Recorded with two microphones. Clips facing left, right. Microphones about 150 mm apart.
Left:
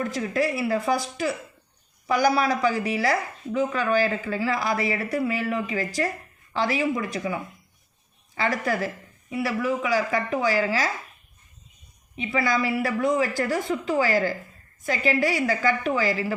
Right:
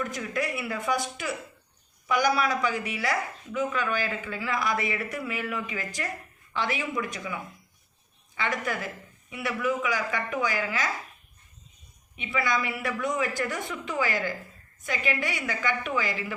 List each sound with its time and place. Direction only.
0.0 s a woman's voice: 30° left (ahead or behind)
12.1 s a woman's voice: 35° left (ahead or behind)